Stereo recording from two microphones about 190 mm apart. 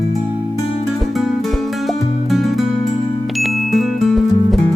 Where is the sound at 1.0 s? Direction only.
Centre (ahead or behind).